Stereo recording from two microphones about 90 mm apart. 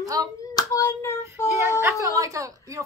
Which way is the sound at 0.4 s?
35° left (ahead or behind).